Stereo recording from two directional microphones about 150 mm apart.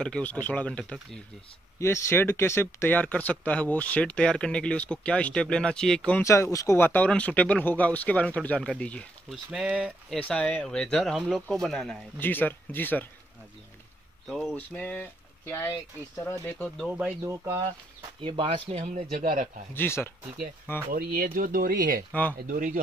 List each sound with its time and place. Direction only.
0.0 s speech: 10° left (ahead or behind)
1.8 s speech: 20° left (ahead or behind)
6.2 s speech: 20° left (ahead or behind); by 10.1 s 5° right (ahead or behind)
10.1 s speech: 5° left (ahead or behind)
12.2 s speech: 15° left (ahead or behind)
14.2 s speech: centre (ahead or behind)
14.5 s speech: 10° left (ahead or behind)
16.8 s speech: 5° right (ahead or behind)
17.2 s speech: 20° right (ahead or behind)
18.2 s speech: 35° right (ahead or behind); by 19.5 s 70° right (ahead or behind)
19.7 s speech: 15° left (ahead or behind)
20.9 s a man's voice: 85° right; by 22.8 s 60° right (ahead or behind)